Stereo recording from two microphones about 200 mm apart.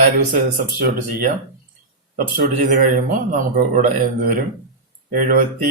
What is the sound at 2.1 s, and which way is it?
A man's voice, 45° right (ahead or behind).